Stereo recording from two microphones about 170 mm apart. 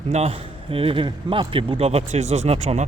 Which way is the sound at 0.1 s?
35° right (ahead or behind).